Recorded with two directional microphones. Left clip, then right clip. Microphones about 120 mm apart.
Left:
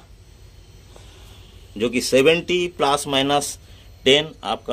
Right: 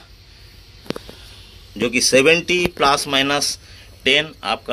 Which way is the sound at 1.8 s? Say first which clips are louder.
Right 2 dB; 15° left (ahead or behind).